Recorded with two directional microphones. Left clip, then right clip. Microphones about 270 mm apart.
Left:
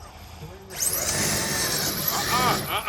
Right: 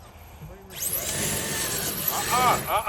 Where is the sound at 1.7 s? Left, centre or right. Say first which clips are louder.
Left 3 dB; centre.